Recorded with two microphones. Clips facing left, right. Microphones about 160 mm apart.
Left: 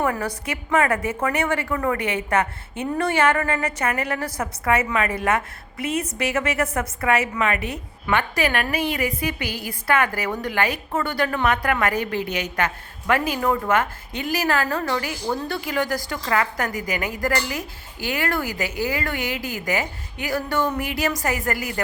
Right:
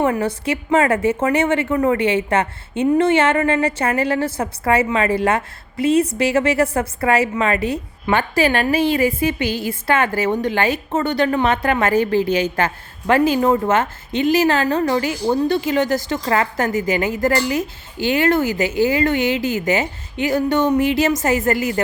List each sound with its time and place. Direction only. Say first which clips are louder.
0.0 s a woman's voice: right 6 dB; 25° right (ahead or behind)